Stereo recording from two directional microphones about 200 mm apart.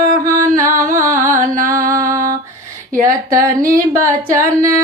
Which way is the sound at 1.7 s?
15° right (ahead or behind).